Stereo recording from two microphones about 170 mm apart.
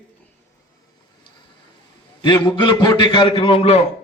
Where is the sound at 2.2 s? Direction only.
25° left (ahead or behind).